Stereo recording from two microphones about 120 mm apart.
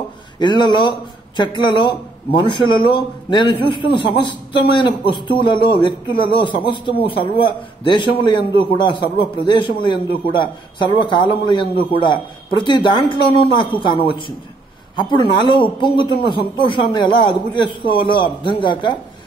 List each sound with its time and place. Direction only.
0.4 s a man's voice: 40° left (ahead or behind)